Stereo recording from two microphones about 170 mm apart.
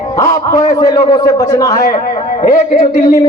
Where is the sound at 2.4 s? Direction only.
60° left (ahead or behind).